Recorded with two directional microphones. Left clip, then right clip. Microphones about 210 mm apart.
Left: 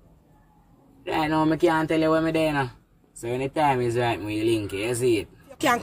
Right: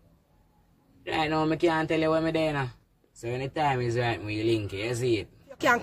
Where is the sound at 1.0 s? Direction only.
15° left (ahead or behind).